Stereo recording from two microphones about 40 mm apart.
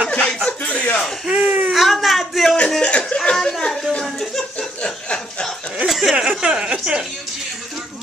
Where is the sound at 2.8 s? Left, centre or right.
Left.